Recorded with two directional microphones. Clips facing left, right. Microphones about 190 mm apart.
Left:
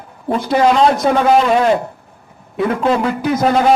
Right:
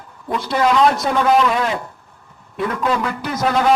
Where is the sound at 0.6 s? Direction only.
30° left (ahead or behind).